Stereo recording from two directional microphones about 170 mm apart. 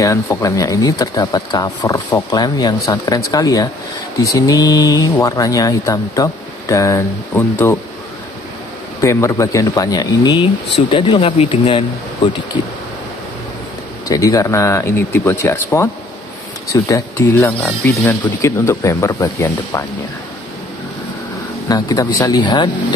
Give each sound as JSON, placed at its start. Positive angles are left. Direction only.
{"t": 0.0, "sound": "speech", "side_deg": 20}
{"t": 9.0, "sound": "speech", "side_deg": 15}
{"t": 14.0, "sound": "speech", "side_deg": 20}
{"t": 21.6, "sound": "speech", "side_deg": 20}